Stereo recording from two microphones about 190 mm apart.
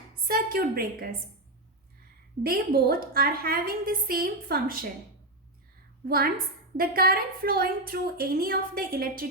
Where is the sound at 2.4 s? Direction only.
50° right (ahead or behind).